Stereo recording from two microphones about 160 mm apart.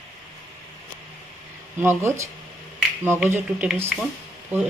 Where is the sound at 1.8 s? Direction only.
15° right (ahead or behind).